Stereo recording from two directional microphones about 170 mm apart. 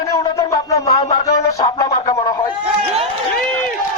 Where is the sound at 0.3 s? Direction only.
20° left (ahead or behind).